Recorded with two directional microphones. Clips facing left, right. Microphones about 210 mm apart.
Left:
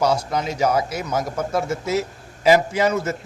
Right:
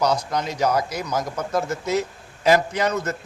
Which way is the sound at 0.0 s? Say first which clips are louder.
Left 2 dB; 5° left (ahead or behind).